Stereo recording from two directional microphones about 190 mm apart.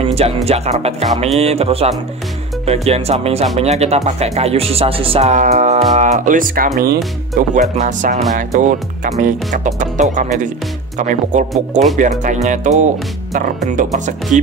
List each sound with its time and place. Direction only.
0.0 s speech: 30° right (ahead or behind)